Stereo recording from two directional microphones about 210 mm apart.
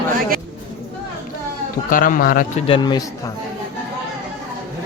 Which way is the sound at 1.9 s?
40° left (ahead or behind).